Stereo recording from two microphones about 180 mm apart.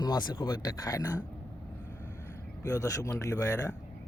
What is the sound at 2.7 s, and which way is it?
Speech, 20° left (ahead or behind).